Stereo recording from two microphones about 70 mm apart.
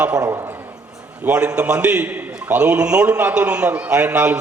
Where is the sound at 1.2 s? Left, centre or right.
Right.